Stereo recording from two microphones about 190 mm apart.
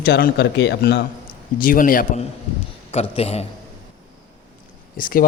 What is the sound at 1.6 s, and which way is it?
Speech, 45° left (ahead or behind).